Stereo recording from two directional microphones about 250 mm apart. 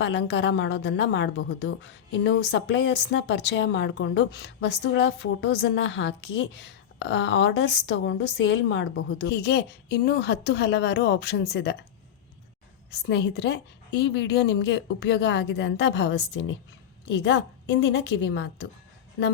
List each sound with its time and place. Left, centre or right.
0.0 s a woman's voice: left
12.9 s a woman's voice: left